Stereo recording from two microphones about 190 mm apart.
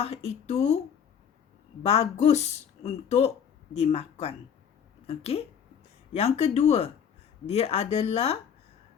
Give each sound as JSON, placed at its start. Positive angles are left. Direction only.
{"t": 0.0, "sound": "speech", "side_deg": 35}
{"t": 1.8, "sound": "speech", "side_deg": 35}